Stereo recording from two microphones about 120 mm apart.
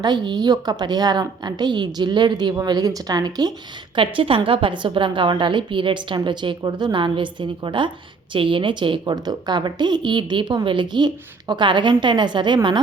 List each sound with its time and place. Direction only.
0.0 s a woman's voice: 35° right (ahead or behind)
3.9 s a woman's voice: 45° right (ahead or behind)